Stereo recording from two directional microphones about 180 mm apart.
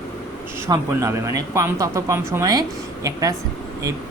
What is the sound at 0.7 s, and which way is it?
Speech, 15° right (ahead or behind).